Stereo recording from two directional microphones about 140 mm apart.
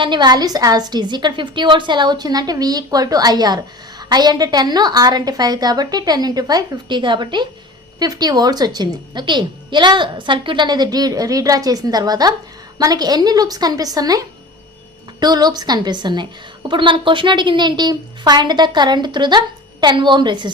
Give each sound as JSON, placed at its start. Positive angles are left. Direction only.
{"t": 0.0, "sound": "a woman's voice", "side_deg": -30}